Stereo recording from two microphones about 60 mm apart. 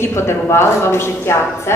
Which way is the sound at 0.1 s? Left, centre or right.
Left.